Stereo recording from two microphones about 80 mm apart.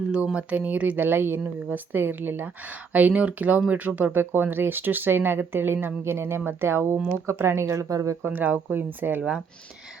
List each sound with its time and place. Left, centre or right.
0.3 s speech: centre; by 8.1 s right
8.2 s speech: right